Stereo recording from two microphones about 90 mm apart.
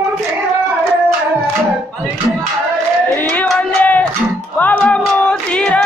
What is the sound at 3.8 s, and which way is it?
Music, 20° left (ahead or behind).